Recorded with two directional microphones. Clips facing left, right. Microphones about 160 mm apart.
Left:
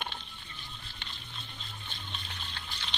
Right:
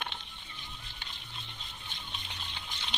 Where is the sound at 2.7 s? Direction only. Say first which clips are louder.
Even; 20° right (ahead or behind).